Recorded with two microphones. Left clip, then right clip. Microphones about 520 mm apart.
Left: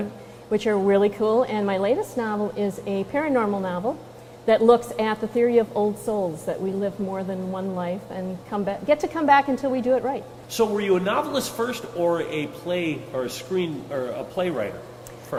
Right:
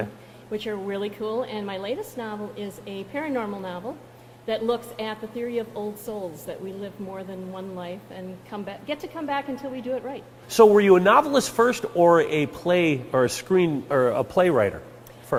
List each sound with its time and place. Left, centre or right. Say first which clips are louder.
0.5 s a woman's voice: left 9 dB; left
10.5 s speech: right 7 dB; right
15.3 s a sound: right 2 dB; right